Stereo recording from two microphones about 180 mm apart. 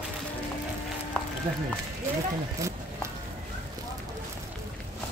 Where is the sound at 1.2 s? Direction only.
5° left (ahead or behind).